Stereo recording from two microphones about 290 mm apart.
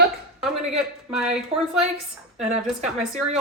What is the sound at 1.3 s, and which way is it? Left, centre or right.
Speech, centre.